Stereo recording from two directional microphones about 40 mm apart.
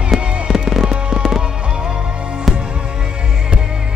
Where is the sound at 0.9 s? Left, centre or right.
Right.